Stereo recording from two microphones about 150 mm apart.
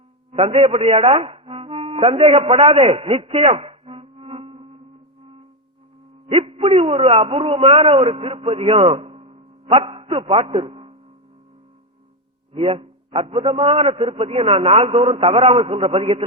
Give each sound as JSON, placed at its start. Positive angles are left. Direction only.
{"t": 0.3, "sound": "speech", "side_deg": -40}
{"t": 6.2, "sound": "a man's voice", "side_deg": -40}
{"t": 12.5, "sound": "a man's voice", "side_deg": -40}